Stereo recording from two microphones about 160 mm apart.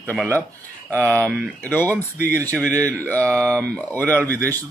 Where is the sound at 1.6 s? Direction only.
10° left (ahead or behind).